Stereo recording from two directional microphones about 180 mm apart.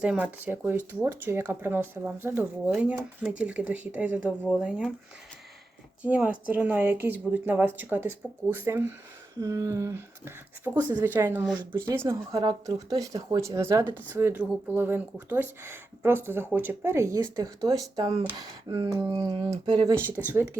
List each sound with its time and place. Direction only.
0.0 s speech: 5° right (ahead or behind)
6.0 s speech: 5° right (ahead or behind)